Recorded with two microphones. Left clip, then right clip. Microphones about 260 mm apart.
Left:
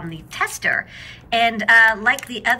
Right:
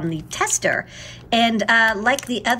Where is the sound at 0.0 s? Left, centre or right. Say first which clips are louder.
Right 1 dB; centre.